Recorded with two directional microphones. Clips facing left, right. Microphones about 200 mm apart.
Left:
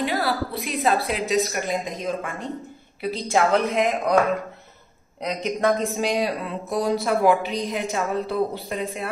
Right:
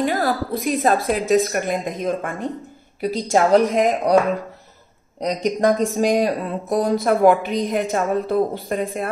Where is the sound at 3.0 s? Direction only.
40° right (ahead or behind).